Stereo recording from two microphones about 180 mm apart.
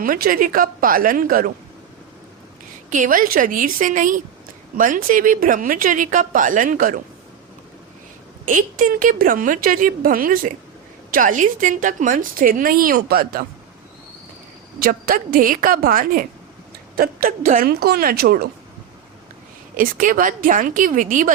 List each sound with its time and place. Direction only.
0.0 s a woman's voice: 50° right (ahead or behind)
2.9 s a woman's voice: 45° right (ahead or behind)
8.4 s a woman's voice: 50° right (ahead or behind)
14.8 s a woman's voice: 55° right (ahead or behind)
19.7 s a woman's voice: 50° right (ahead or behind)